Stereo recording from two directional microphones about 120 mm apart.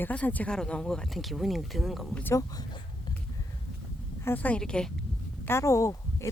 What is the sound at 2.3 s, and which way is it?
Speech, 30° left (ahead or behind).